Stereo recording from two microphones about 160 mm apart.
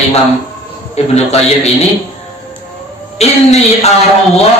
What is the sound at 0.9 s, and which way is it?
Speech, 40° left (ahead or behind).